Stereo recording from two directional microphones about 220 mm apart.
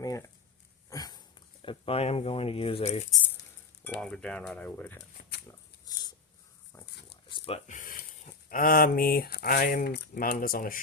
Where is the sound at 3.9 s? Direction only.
5° left (ahead or behind).